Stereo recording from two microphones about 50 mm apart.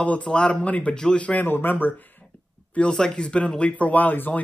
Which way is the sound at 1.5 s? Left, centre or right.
Left.